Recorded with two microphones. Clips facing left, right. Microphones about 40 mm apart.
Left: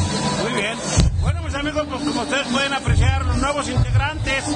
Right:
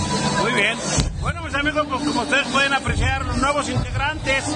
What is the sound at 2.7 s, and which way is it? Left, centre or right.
A man's voice, centre.